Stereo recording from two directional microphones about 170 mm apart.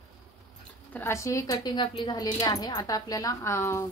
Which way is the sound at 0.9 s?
15° left (ahead or behind).